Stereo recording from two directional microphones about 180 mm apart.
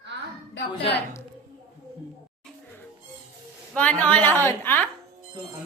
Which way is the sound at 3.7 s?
10° left (ahead or behind).